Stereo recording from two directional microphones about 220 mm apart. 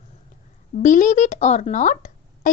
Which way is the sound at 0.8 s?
35° left (ahead or behind).